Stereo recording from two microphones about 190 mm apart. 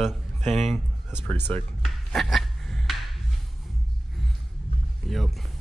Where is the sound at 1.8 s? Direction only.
Centre (ahead or behind).